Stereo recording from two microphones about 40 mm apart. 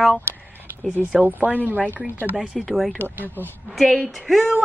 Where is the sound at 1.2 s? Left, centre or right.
Right.